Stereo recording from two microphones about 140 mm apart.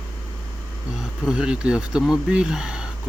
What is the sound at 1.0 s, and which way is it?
Speech, 5° right (ahead or behind).